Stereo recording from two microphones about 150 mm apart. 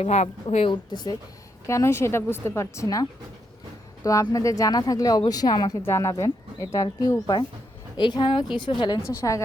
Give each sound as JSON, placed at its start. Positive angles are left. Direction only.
{"t": 0.0, "sound": "a woman's voice", "side_deg": 45}